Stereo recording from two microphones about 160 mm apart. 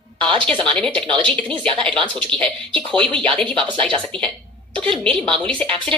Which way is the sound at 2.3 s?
5° left (ahead or behind).